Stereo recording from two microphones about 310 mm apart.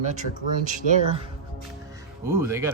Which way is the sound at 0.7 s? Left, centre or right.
Right.